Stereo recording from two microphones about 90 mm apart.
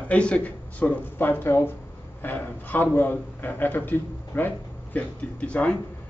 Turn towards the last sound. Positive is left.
turn(degrees=15)  # may be behind; listen again after turning